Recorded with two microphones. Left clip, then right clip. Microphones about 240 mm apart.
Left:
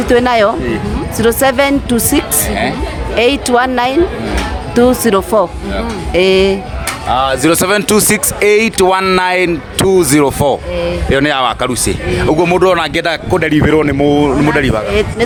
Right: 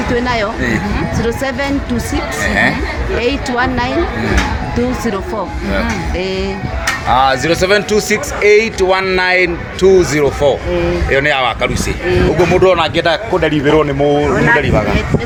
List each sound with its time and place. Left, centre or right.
0.1 s speech: left